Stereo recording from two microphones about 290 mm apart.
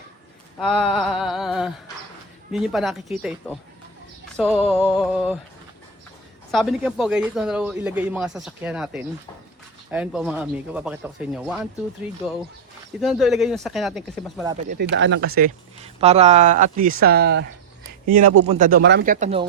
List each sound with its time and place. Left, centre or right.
0.6 s a man's voice: centre
4.4 s music: centre
4.7 s a man's voice: centre
6.5 s a man's voice: centre
13.0 s a man's voice: centre
14.4 s speech: right
14.8 s speech: right
18.2 s speech: right
18.4 s speech: right